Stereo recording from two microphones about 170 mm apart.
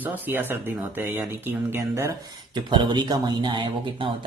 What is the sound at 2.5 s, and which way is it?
Speech, 25° right (ahead or behind).